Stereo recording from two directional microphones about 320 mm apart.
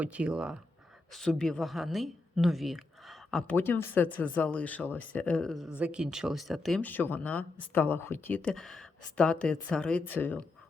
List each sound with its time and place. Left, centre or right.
0.0 s a woman's voice: centre